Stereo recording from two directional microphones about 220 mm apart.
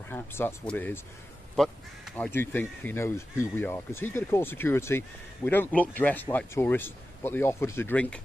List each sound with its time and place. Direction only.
0.1 s speech: 10° left (ahead or behind)